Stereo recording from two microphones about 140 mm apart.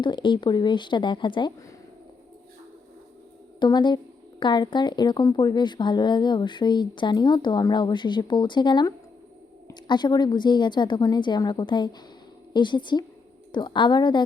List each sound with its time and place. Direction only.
0.0 s a woman's voice: 35° left (ahead or behind)
3.6 s a woman's voice: 35° left (ahead or behind)